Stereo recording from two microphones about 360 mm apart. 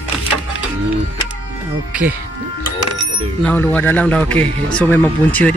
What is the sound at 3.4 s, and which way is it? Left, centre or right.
Speech, centre.